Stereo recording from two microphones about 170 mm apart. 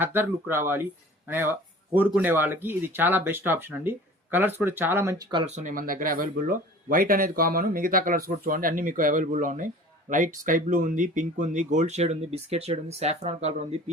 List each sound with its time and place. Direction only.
0.0 s speech: 10° right (ahead or behind)
5.5 s speech: 45° right (ahead or behind)